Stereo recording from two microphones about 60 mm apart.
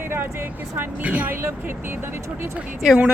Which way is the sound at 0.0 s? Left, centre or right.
Right.